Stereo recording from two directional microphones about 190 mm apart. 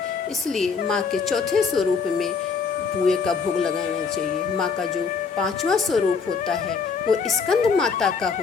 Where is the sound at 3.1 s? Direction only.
Centre (ahead or behind).